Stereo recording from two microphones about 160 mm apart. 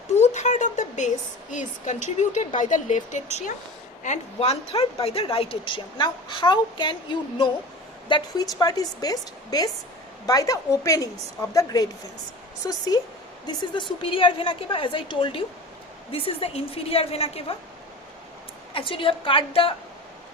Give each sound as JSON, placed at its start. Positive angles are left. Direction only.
{"t": 0.1, "sound": "a woman's voice", "side_deg": 45}
{"t": 18.7, "sound": "speech", "side_deg": 35}